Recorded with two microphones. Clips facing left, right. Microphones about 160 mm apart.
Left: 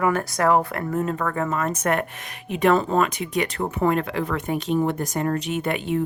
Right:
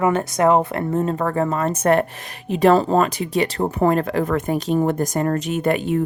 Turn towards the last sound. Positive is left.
turn(degrees=-45)  # may be behind; listen again after turning